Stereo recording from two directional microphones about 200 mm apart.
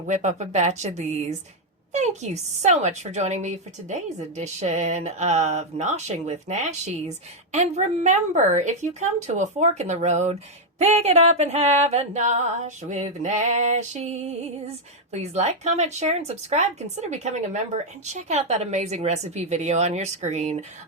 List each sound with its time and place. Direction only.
0.1 s speech: 35° right (ahead or behind)